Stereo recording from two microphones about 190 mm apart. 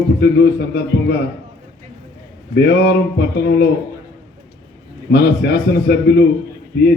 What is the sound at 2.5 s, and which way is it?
A man's voice, 55° left (ahead or behind).